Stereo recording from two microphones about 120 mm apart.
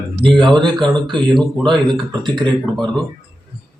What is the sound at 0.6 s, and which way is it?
Speech, 40° right (ahead or behind).